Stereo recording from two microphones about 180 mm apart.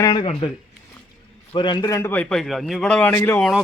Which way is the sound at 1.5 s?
25° left (ahead or behind).